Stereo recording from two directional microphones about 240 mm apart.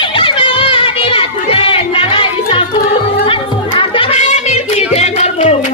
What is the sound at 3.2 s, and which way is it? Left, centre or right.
Music, left.